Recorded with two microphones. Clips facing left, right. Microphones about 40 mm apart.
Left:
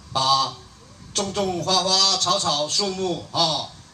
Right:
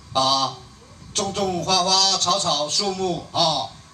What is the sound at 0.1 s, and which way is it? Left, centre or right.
Speech, right.